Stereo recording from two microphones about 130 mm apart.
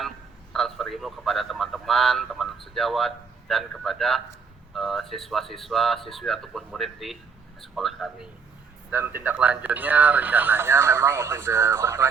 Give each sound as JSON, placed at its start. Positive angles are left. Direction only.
{"t": 0.5, "sound": "a man's voice", "side_deg": 0}
{"t": 8.9, "sound": "speech", "side_deg": -15}